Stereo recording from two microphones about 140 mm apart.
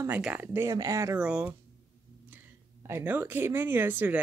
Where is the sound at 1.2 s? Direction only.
5° right (ahead or behind).